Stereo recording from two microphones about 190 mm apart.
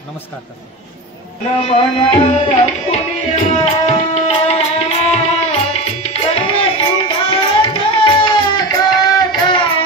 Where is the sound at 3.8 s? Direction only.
35° left (ahead or behind).